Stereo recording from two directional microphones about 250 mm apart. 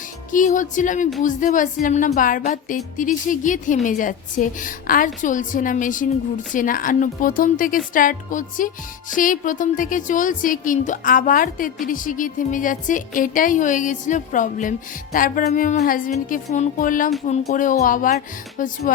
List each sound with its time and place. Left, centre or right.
0.3 s speech: left